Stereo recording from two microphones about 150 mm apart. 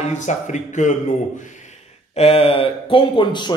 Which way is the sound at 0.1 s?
50° left (ahead or behind).